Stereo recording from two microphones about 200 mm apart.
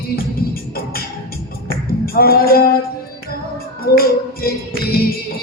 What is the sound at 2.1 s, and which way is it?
Music, 50° left (ahead or behind).